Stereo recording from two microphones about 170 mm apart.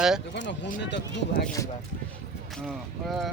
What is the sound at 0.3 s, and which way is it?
Speech, 90° left.